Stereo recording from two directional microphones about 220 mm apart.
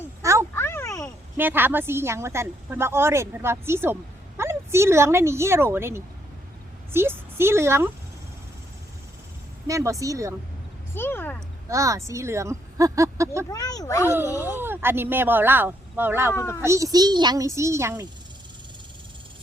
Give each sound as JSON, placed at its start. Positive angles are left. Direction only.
{"t": 0.2, "sound": "a sound", "side_deg": -15}
{"t": 0.5, "sound": "a sound", "side_deg": 10}
{"t": 1.4, "sound": "a woman's voice", "side_deg": -10}
{"t": 9.6, "sound": "a woman's voice", "side_deg": -15}
{"t": 10.9, "sound": "speech", "side_deg": 10}
{"t": 11.7, "sound": "a woman's voice", "side_deg": -15}
{"t": 13.5, "sound": "speech", "side_deg": 15}
{"t": 14.4, "sound": "a woman's voice", "side_deg": -10}
{"t": 16.3, "sound": "speech", "side_deg": 10}
{"t": 16.6, "sound": "a woman's voice", "side_deg": -15}